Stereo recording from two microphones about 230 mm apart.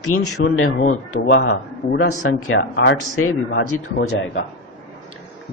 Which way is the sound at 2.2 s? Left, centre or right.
Left.